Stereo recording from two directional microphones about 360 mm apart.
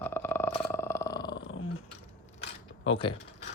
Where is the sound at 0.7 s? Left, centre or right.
Centre.